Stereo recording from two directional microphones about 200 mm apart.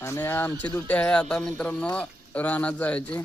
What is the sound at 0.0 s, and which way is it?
Speech, 10° left (ahead or behind).